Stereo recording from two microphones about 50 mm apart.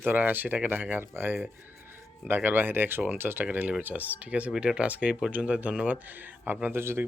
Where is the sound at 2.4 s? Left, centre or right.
Right.